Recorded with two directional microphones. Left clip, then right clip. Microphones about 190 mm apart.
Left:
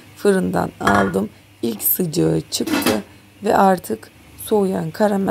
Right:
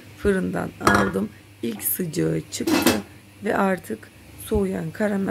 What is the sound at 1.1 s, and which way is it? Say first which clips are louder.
A woman's voice: left 5 dB; 15° left (ahead or behind).